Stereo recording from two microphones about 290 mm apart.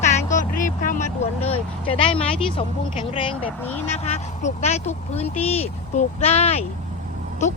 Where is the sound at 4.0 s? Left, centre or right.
Left.